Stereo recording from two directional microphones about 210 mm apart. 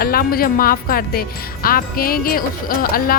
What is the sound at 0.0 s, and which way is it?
Speech, 45° left (ahead or behind).